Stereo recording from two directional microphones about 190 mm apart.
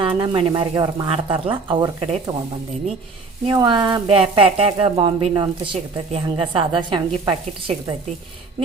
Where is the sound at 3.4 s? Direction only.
25° right (ahead or behind).